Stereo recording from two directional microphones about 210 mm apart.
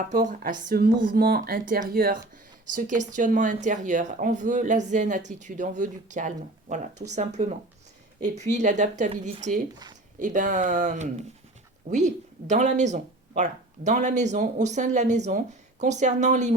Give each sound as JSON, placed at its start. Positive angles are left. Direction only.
{"t": 0.3, "sound": "speech", "side_deg": -40}